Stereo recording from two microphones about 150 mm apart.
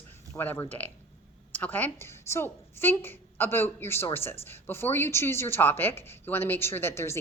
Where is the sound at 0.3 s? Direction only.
15° left (ahead or behind).